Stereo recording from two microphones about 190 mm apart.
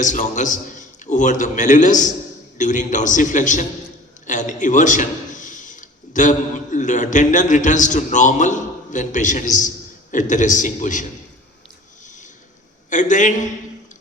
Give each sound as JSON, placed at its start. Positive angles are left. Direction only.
{"t": 0.0, "sound": "a man's voice", "side_deg": 40}
{"t": 12.9, "sound": "a man's voice", "side_deg": 40}